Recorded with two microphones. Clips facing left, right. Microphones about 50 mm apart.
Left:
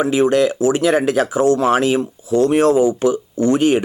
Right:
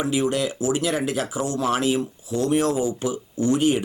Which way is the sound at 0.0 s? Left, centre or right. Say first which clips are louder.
Left 8 dB; left.